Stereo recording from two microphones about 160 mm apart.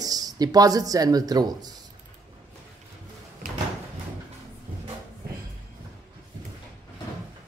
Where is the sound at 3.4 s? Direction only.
55° right (ahead or behind).